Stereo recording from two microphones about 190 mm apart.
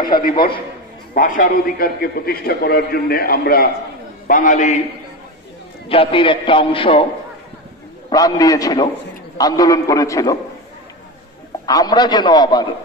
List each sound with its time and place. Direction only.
1.1 s a man's voice: 45° left (ahead or behind)
5.9 s a man's voice: 30° left (ahead or behind)
8.1 s a man's voice: 20° left (ahead or behind)
11.6 s a man's voice: 20° left (ahead or behind)